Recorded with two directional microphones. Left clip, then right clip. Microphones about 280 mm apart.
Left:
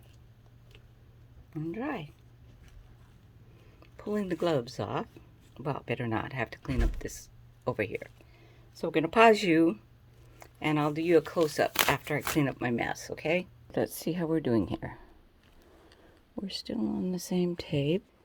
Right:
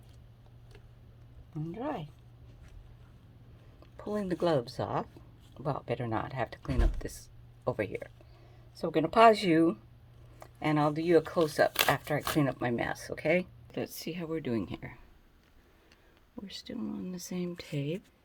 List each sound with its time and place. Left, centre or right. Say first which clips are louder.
1.5 s speech: left 2 dB; left
3.9 s speech: left 1 dB; centre
16.3 s speech: left 6 dB; left